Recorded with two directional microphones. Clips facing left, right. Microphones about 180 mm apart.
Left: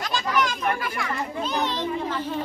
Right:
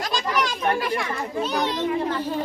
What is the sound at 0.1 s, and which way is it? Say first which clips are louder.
Children playing: left 2 dB; 35° right (ahead or behind).